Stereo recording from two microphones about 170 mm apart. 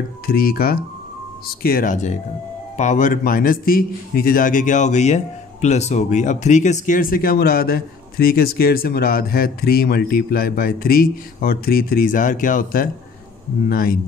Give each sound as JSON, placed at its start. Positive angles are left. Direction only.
{"t": 0.3, "sound": "a man's voice", "side_deg": 60}